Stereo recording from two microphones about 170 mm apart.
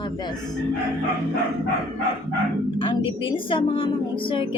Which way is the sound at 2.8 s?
30° left (ahead or behind).